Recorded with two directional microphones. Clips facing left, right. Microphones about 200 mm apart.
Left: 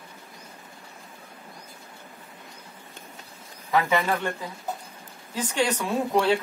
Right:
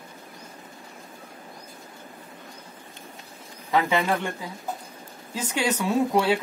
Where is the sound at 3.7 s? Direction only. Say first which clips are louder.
Even; 20° right (ahead or behind).